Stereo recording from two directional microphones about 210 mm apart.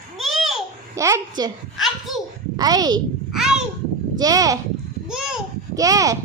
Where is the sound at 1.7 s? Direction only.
Centre (ahead or behind).